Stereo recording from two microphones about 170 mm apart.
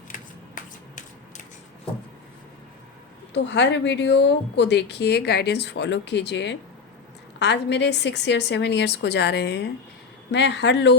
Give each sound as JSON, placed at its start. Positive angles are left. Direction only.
{"t": 0.1, "sound": "shuffling cards", "side_deg": 50}
{"t": 3.3, "sound": "a woman's voice", "side_deg": 90}